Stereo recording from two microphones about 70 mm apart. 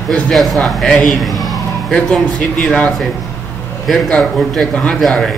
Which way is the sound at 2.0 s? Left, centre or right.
Centre.